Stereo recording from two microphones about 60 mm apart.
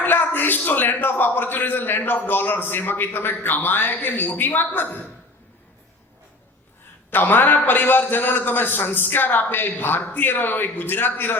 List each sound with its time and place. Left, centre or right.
0.0 s a man's voice: left
7.1 s a man's voice: left